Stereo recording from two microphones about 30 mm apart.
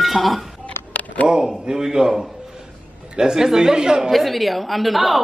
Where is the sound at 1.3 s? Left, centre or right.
Centre.